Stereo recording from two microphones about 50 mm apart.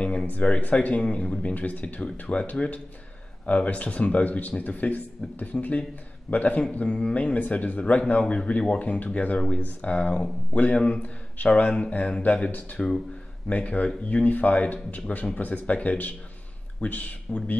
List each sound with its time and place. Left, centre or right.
0.0 s a sound: left
0.7 s speech: left
2.0 s speech: left